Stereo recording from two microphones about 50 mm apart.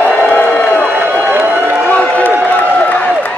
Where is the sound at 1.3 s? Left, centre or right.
Right.